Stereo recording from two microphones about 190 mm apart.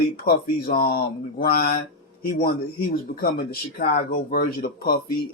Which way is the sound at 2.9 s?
50° left (ahead or behind).